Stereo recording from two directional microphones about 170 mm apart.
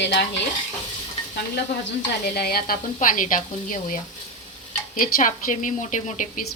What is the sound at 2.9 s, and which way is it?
A woman's voice, 50° left (ahead or behind).